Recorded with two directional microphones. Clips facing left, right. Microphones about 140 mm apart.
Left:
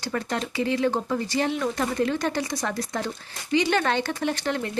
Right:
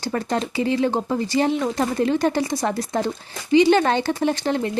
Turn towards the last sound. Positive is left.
turn(degrees=-30)  # may be behind; listen again after turning